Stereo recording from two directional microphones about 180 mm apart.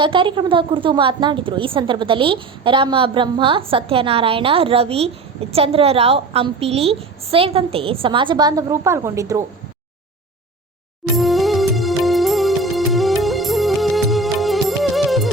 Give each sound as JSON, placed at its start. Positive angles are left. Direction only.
{"t": 0.0, "sound": "a woman's voice", "side_deg": -30}
{"t": 11.2, "sound": "music", "side_deg": 0}